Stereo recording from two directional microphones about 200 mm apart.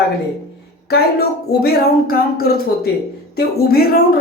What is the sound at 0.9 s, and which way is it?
A woman's voice, 50° left (ahead or behind).